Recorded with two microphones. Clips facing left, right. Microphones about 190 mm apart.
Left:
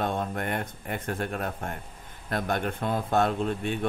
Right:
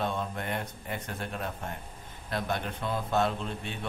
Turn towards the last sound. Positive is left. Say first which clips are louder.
# left 9 dB
turn(degrees=55)  # may be behind; listen again after turning